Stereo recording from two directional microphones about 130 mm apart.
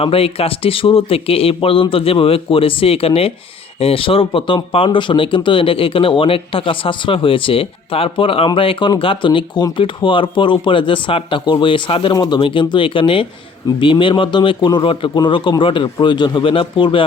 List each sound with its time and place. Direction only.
0.0 s a man's voice: 45° left (ahead or behind)